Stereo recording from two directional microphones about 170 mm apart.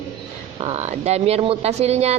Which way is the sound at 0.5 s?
40° right (ahead or behind).